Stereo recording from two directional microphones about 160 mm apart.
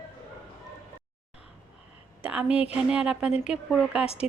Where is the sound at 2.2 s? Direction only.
5° right (ahead or behind).